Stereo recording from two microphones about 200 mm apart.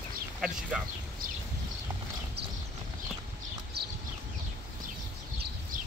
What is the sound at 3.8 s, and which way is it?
Clip-clop, 55° right (ahead or behind).